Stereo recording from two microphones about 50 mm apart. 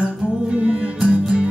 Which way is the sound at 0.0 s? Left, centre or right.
Right.